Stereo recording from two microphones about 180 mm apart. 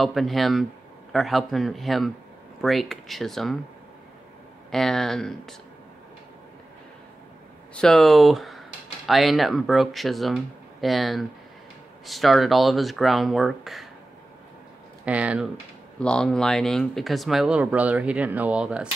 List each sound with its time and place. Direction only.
0.0 s speech: centre (ahead or behind)
4.6 s speech: 5° left (ahead or behind)
7.7 s speech: 5° left (ahead or behind)
15.0 s speech: 5° right (ahead or behind)
16.0 s speech: 5° left (ahead or behind)